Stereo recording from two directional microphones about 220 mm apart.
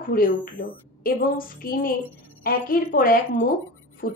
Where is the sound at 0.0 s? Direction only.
40° left (ahead or behind).